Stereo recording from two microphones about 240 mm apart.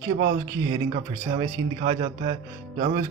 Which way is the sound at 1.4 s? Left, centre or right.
Right.